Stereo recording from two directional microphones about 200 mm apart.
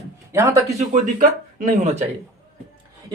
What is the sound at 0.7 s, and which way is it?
Speech, 40° right (ahead or behind).